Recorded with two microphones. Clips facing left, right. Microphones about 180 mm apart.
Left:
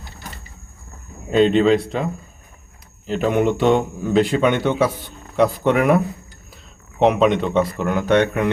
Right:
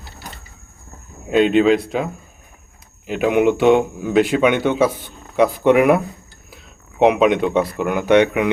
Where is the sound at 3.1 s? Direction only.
10° right (ahead or behind).